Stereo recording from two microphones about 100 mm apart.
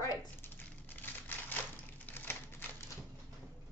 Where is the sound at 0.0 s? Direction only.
40° left (ahead or behind).